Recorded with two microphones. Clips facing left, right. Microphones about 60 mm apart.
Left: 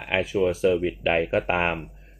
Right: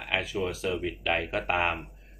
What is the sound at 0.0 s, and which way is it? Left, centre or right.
Speech, left.